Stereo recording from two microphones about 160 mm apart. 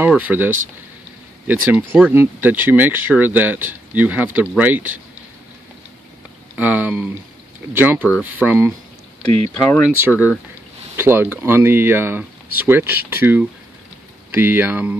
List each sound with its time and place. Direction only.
0.2 s speech: 10° right (ahead or behind)
6.5 s speech: 10° right (ahead or behind)
9.2 s speech: 40° right (ahead or behind)
9.8 s speech: 10° right (ahead or behind)